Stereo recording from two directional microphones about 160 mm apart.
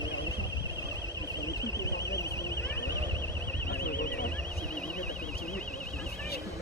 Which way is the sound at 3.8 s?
70° left (ahead or behind).